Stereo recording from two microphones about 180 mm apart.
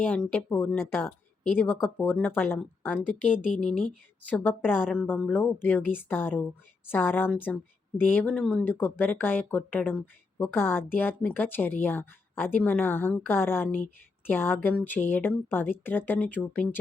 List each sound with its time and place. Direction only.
0.1 s a woman's voice: 10° left (ahead or behind)